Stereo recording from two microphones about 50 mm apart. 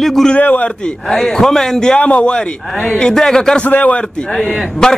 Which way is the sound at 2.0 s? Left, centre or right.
Left.